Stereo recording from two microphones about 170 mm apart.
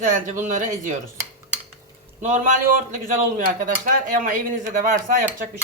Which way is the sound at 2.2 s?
45° right (ahead or behind).